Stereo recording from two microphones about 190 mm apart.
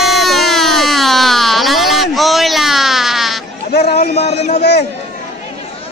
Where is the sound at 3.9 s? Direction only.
35° left (ahead or behind).